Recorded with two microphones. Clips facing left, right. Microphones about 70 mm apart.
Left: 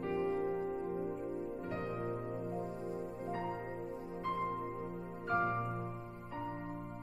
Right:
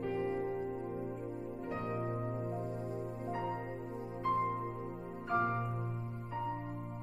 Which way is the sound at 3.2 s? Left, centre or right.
Centre.